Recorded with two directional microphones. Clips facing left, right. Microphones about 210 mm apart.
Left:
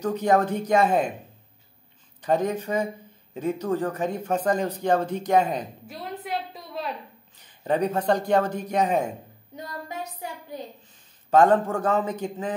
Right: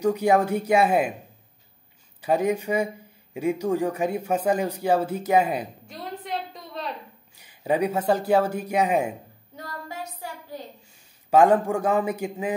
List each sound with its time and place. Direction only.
0.0 s speech: 10° right (ahead or behind)
2.2 s speech: 10° right (ahead or behind)
5.9 s a sound: 5° left (ahead or behind)
7.3 s speech: 10° right (ahead or behind)
9.6 s child singing: 20° left (ahead or behind)
11.2 s speech: 10° right (ahead or behind)